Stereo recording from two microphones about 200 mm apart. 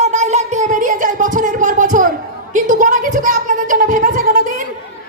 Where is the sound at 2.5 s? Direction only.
40° right (ahead or behind).